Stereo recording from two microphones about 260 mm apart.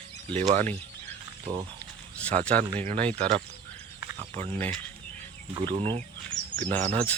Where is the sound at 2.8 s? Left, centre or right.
Right.